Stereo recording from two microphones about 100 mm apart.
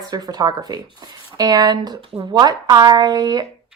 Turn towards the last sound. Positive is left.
turn(degrees=-40)  # may be behind; listen again after turning